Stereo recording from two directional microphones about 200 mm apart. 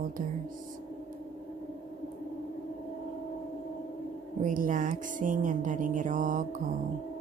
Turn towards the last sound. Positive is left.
turn(degrees=-40)  # may be behind; listen again after turning